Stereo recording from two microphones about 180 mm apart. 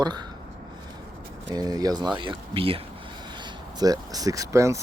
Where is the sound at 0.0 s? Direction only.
25° right (ahead or behind).